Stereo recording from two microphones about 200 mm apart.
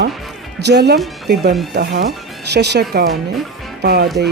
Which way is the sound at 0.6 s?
55° right (ahead or behind).